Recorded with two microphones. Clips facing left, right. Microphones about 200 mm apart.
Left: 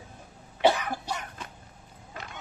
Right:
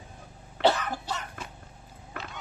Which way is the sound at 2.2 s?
65° right (ahead or behind).